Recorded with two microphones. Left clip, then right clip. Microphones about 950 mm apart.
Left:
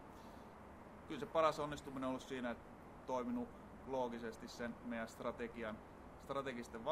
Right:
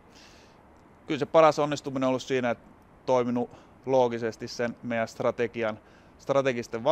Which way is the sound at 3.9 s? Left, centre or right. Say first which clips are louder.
Right 19 dB; right.